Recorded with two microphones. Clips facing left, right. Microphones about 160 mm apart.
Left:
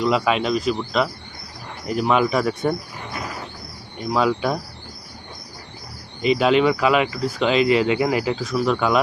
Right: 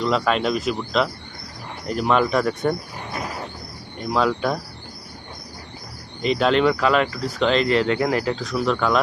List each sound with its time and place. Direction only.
0.0 s speech: 5° left (ahead or behind)
4.1 s speech: 5° left (ahead or behind)
6.2 s speech: 5° left (ahead or behind)